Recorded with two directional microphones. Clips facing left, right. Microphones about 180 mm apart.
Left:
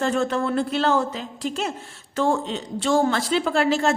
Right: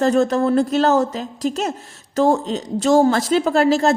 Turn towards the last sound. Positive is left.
turn(degrees=-40)  # may be behind; listen again after turning